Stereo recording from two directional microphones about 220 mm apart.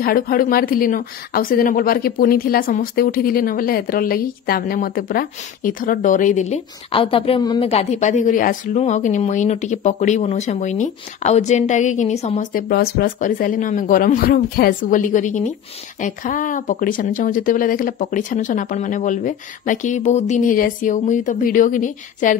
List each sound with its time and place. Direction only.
0.0 s speech: 40° left (ahead or behind)